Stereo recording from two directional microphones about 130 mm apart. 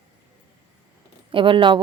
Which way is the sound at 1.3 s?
40° right (ahead or behind).